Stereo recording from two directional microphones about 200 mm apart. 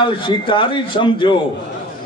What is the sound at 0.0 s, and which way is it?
A man's voice, 25° left (ahead or behind).